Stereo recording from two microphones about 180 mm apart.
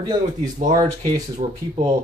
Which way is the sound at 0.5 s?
45° right (ahead or behind).